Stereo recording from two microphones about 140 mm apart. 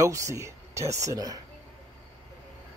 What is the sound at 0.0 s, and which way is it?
Speech, 20° right (ahead or behind).